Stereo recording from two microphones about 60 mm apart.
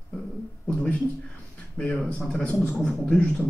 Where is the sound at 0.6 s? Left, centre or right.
Centre.